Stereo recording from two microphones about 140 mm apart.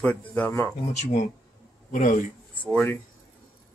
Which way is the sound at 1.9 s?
65° left (ahead or behind).